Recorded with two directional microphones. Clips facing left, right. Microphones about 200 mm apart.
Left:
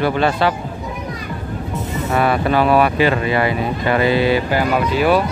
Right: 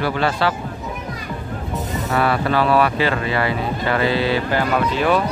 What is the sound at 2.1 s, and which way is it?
Speech, 15° left (ahead or behind).